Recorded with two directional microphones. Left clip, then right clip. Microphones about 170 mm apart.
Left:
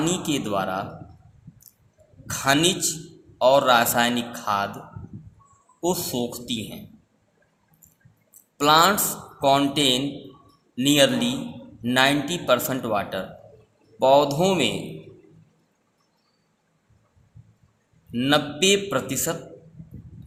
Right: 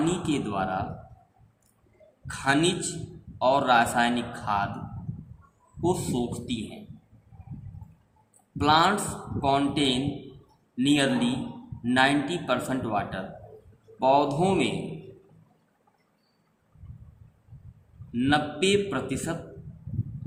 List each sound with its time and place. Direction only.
0.0 s speech: 55° left (ahead or behind)
2.2 s a man's voice: 55° left (ahead or behind)
5.8 s speech: 50° left (ahead or behind)
8.5 s a man's voice: 55° left (ahead or behind)
18.1 s a man's voice: 55° left (ahead or behind)